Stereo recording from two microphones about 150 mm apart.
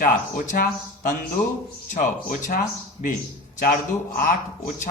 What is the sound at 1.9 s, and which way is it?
Speech, 60° left (ahead or behind).